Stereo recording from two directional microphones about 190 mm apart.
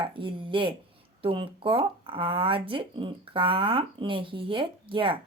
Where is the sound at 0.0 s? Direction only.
25° right (ahead or behind).